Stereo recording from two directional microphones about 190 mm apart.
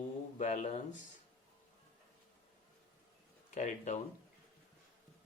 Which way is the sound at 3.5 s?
40° left (ahead or behind).